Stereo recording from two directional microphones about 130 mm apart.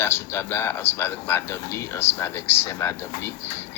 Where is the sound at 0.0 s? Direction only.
20° left (ahead or behind).